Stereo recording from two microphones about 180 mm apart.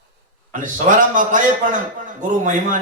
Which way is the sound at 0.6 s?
45° right (ahead or behind).